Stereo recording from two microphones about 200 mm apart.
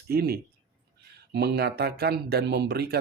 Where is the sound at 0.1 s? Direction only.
50° right (ahead or behind).